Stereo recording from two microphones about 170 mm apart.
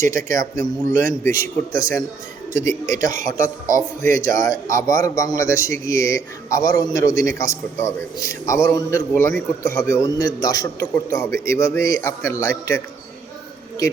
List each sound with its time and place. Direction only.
0.1 s a man's voice: 20° left (ahead or behind)